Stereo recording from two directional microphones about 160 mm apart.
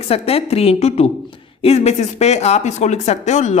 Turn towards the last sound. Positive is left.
turn(degrees=45)  # may be behind; listen again after turning